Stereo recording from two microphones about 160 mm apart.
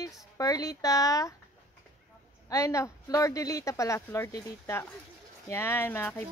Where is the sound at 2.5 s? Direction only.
20° left (ahead or behind).